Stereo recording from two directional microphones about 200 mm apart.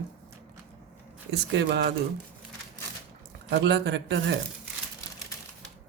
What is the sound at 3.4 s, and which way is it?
Speech, 60° right (ahead or behind).